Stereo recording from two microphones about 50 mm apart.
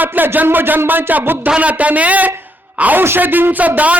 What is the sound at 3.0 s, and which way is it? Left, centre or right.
Speech, right.